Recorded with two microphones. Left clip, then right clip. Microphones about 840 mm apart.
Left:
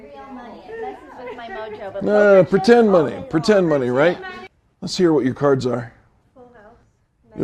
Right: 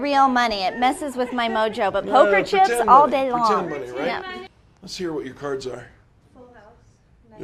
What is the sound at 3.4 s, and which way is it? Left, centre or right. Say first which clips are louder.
Speech: left 4 dB; left.